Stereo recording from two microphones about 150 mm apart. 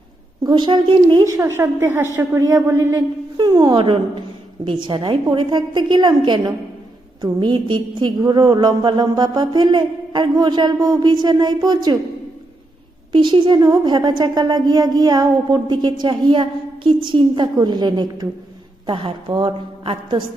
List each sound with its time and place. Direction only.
0.4 s a woman's voice: 30° right (ahead or behind)
1.4 s a woman's voice: 15° right (ahead or behind)
13.1 s a woman's voice: 35° right (ahead or behind)